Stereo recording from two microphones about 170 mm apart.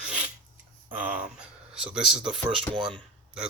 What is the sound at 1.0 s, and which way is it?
Speech, 10° right (ahead or behind).